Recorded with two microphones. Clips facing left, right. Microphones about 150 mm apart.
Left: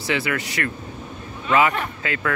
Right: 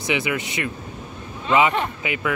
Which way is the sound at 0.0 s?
15° right (ahead or behind).